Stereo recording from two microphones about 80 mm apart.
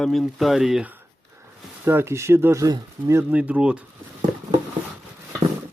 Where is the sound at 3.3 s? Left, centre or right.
Centre.